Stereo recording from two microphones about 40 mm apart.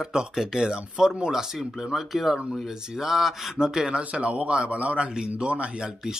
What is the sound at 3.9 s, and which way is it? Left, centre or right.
A man's voice, right.